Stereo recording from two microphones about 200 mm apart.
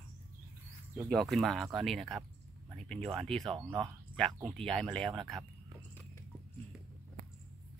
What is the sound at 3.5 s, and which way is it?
Speech, 20° right (ahead or behind).